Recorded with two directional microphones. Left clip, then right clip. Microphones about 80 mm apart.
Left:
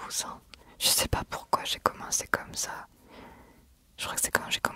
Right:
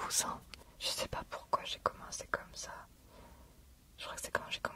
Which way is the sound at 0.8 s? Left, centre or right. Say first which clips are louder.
Left 11 dB; left.